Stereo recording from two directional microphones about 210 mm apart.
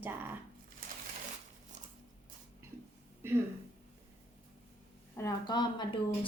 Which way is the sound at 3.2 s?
10° right (ahead or behind).